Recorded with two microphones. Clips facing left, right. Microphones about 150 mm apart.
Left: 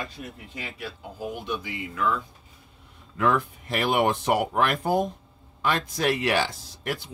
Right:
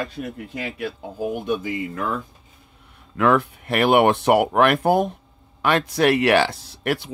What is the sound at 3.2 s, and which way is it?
Speech, 75° right (ahead or behind).